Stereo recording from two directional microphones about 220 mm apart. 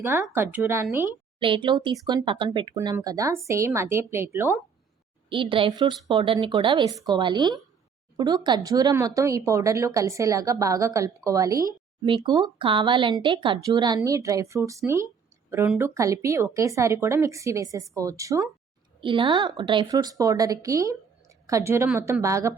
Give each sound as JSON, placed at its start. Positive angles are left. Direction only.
{"t": 0.0, "sound": "speech", "side_deg": -10}
{"t": 1.4, "sound": "speech", "side_deg": -25}
{"t": 5.3, "sound": "speech", "side_deg": -25}